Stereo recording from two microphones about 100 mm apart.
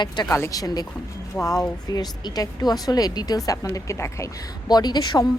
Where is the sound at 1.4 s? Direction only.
20° left (ahead or behind).